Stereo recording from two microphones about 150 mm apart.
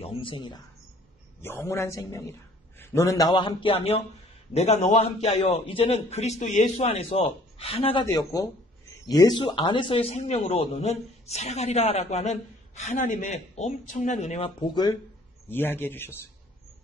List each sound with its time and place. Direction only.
0.0 s speech: 35° left (ahead or behind)
1.4 s a man's voice: 15° left (ahead or behind); by 8.1 s 35° left (ahead or behind)
8.1 s speech: 20° left (ahead or behind); by 14.5 s 45° left (ahead or behind)
15.4 s a man's voice: 15° left (ahead or behind)